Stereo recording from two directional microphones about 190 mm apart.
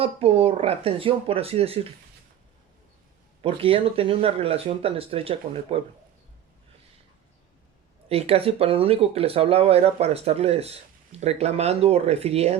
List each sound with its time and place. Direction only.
0.0 s speech: 30° right (ahead or behind)
3.4 s speech: 30° right (ahead or behind)
8.1 s speech: 30° right (ahead or behind)